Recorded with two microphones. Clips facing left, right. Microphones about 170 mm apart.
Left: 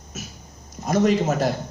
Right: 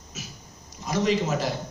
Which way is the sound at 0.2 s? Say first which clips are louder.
Left 4 dB; 50° left (ahead or behind).